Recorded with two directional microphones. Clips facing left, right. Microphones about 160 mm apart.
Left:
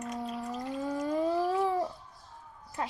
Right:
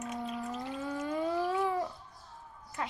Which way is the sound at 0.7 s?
35° left (ahead or behind).